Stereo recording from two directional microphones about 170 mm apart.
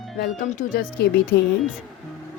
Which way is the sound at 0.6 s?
50° left (ahead or behind).